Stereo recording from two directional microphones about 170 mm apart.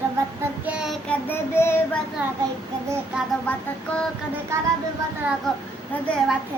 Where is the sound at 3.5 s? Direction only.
5° left (ahead or behind).